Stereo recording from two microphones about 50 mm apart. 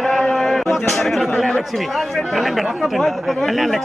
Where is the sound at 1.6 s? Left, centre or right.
Centre.